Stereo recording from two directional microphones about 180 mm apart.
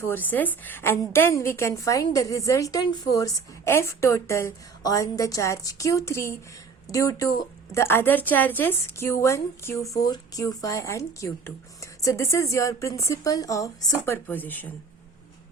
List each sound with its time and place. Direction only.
0.0 s a woman's voice: 10° left (ahead or behind)